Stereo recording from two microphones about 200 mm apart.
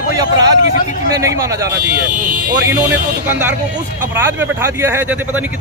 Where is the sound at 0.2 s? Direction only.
20° right (ahead or behind).